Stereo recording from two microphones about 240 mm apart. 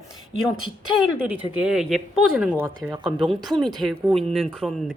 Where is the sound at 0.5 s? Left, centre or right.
Right.